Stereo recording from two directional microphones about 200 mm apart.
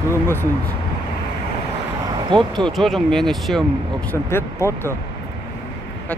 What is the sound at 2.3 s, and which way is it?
Speech, 25° right (ahead or behind).